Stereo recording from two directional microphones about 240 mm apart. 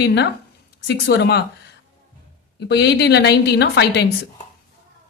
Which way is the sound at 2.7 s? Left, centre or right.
Left.